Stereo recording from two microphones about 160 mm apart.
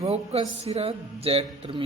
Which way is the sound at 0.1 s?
40° right (ahead or behind).